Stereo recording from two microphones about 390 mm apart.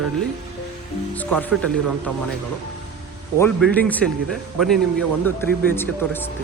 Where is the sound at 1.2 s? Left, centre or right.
Centre.